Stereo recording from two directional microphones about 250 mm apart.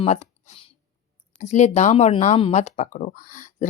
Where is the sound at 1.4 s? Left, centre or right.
Left.